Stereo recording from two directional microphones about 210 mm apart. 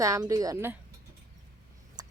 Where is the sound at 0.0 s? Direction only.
15° right (ahead or behind).